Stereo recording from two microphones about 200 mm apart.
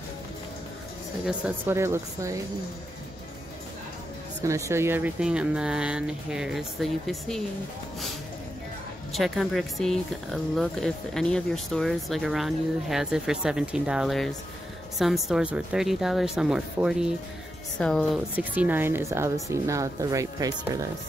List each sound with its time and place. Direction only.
1.2 s speech: 10° right (ahead or behind)
4.4 s speech: 15° right (ahead or behind); by 7.4 s centre (ahead or behind)
9.1 s speech: centre (ahead or behind)
18.3 s speech: 10° right (ahead or behind)